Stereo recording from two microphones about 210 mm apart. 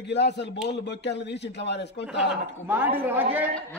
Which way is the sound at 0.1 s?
55° left (ahead or behind).